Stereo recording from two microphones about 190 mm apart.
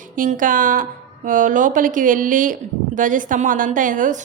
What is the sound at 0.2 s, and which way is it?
A woman's voice, 45° right (ahead or behind).